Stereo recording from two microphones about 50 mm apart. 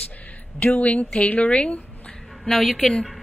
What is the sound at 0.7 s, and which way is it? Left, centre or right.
A woman's voice, left.